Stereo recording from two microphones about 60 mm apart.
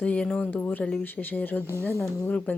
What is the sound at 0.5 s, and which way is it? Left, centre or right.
A woman's voice, left.